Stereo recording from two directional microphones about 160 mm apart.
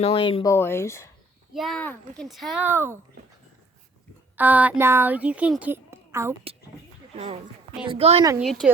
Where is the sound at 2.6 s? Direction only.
15° right (ahead or behind).